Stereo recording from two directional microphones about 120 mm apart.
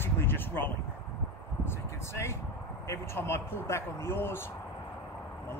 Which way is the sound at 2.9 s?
20° left (ahead or behind).